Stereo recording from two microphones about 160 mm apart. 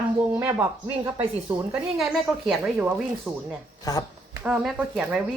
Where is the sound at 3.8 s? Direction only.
25° left (ahead or behind).